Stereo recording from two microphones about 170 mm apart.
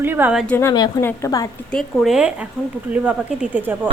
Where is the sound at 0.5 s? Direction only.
20° left (ahead or behind).